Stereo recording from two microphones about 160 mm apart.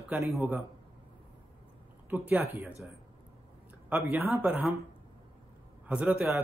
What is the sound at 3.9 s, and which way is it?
Speech, 10° right (ahead or behind).